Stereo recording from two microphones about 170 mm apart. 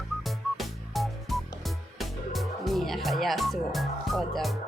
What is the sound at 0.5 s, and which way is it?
Music, centre (ahead or behind).